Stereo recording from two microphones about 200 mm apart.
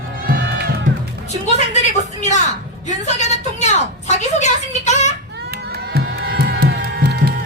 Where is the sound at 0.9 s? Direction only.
40° right (ahead or behind).